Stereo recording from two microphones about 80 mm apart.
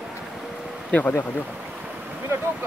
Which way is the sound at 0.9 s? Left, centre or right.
Centre.